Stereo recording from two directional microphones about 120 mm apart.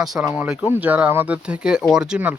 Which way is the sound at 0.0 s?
5° right (ahead or behind).